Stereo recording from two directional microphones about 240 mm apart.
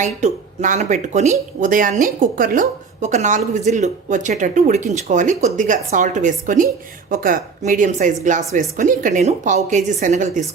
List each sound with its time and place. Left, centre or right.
0.0 s speech: right